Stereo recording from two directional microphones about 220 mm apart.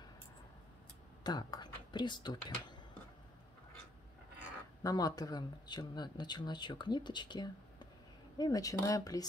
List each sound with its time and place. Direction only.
1.2 s speech: 20° left (ahead or behind)
4.8 s speech: 15° left (ahead or behind)